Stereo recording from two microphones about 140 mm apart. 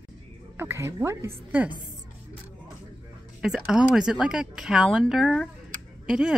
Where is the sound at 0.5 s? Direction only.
20° right (ahead or behind).